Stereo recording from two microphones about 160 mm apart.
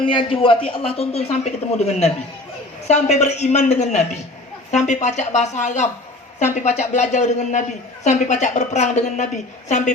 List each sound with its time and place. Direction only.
0.0 s a woman's voice: 30° left (ahead or behind); by 9.9 s 50° left (ahead or behind)